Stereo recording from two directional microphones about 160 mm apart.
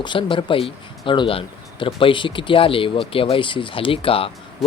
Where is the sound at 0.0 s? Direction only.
30° left (ahead or behind).